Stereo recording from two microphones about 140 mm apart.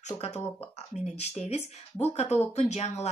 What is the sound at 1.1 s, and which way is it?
Speech, 50° left (ahead or behind).